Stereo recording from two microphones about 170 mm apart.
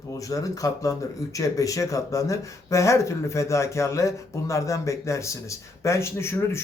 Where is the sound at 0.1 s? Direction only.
20° left (ahead or behind).